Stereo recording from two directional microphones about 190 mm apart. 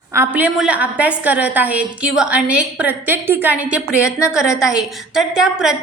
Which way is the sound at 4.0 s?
15° left (ahead or behind).